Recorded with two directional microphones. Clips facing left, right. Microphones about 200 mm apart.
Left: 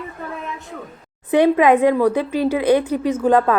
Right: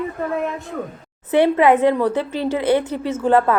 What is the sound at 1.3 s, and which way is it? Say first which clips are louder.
A woman's voice: left 1 dB; 15° left (ahead or behind).